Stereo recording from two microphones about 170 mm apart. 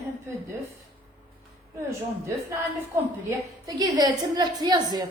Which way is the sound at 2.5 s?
20° right (ahead or behind).